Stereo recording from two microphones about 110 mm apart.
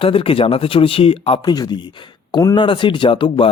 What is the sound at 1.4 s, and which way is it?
Speech, 40° left (ahead or behind).